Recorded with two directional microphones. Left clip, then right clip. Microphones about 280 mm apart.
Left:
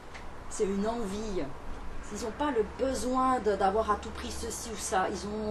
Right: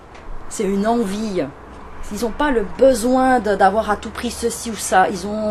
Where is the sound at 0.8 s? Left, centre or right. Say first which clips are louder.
Right 14 dB; right.